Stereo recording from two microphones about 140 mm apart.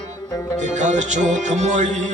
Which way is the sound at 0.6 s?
55° right (ahead or behind).